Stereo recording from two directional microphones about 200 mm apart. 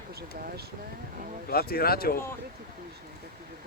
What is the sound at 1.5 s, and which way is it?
Speech, 50° left (ahead or behind).